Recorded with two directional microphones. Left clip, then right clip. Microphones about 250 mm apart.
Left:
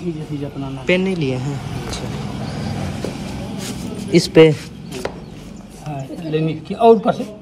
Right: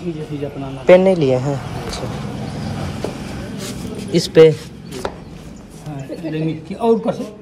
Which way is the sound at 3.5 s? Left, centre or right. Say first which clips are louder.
Even; centre.